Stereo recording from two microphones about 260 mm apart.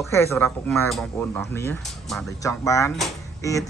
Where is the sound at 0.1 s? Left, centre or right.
Centre.